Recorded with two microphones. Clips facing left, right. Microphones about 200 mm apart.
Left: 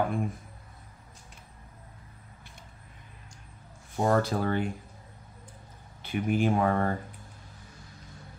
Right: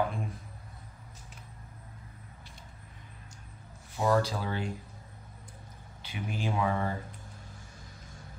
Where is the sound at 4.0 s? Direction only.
50° left (ahead or behind).